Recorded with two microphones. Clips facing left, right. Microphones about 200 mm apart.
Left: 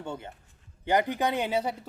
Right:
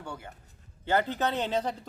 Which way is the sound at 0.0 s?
25° left (ahead or behind).